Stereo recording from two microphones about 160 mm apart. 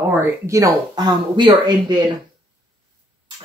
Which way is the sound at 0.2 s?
20° right (ahead or behind).